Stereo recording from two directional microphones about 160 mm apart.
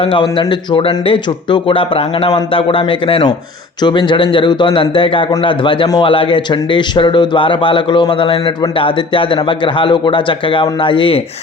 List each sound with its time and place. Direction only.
0.0 s a man's voice: 30° left (ahead or behind)